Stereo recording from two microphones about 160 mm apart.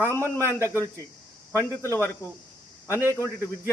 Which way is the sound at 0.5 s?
15° right (ahead or behind).